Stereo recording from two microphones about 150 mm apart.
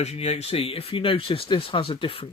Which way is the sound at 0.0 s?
45° left (ahead or behind).